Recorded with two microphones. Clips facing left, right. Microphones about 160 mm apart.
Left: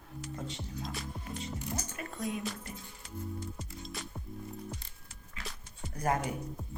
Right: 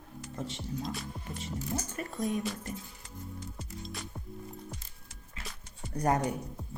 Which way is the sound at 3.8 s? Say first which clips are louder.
Right 1 dB; centre (ahead or behind).